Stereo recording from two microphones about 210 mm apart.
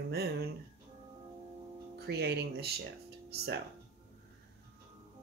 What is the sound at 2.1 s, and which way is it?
Speech, 50° right (ahead or behind).